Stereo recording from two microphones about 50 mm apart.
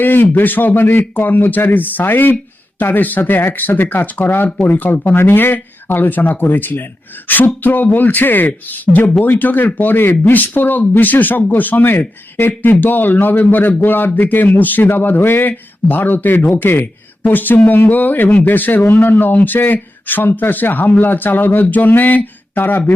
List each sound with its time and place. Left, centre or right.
0.0 s speech: left